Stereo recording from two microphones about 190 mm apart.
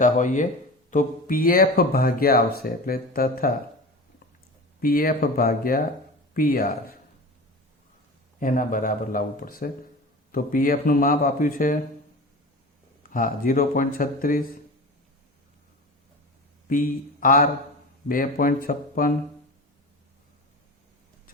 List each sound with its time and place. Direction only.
0.0 s speech: 40° left (ahead or behind)
4.8 s speech: 50° left (ahead or behind)
8.4 s speech: 45° left (ahead or behind)
13.0 s speech: 45° left (ahead or behind)
16.6 s a man's voice: 45° left (ahead or behind)